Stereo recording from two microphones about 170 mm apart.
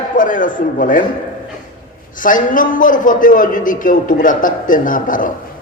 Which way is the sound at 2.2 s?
50° left (ahead or behind).